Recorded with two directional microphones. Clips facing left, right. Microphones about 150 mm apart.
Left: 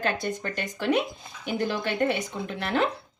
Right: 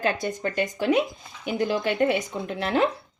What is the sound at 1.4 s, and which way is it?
Speech, 10° right (ahead or behind).